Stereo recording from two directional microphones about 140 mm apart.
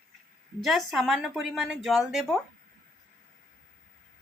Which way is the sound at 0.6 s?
Centre (ahead or behind).